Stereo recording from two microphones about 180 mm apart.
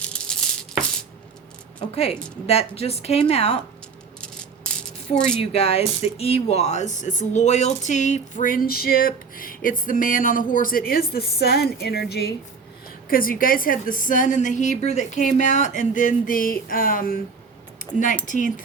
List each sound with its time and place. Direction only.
0.0 s a sound: 5° left (ahead or behind)
2.5 s a woman's voice: 35° left (ahead or behind)
5.4 s speech: 35° left (ahead or behind); by 12.3 s 65° left (ahead or behind)
13.1 s speech: 50° left (ahead or behind)